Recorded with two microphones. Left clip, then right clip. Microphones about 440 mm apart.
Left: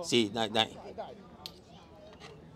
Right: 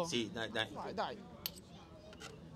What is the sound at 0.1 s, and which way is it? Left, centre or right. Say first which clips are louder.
Speech: left 10 dB; left.